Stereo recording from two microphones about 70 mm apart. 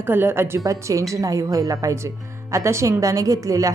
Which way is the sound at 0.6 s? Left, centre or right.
Right.